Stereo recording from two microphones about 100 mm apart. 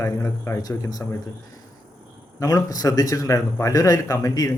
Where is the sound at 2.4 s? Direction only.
35° left (ahead or behind).